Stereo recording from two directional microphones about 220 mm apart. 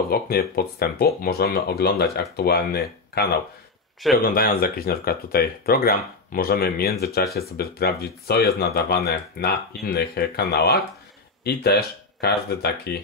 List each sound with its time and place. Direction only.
0.1 s speech: 45° left (ahead or behind)